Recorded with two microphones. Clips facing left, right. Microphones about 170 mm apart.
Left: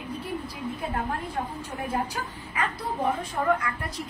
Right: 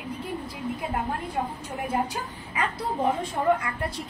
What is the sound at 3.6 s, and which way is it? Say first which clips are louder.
Speech: right 1 dB; 30° right (ahead or behind).